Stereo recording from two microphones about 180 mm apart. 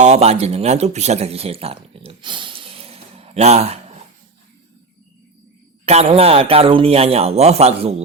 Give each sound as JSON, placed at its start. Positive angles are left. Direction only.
{"t": 0.0, "sound": "speech", "side_deg": -35}
{"t": 5.8, "sound": "speech", "side_deg": -35}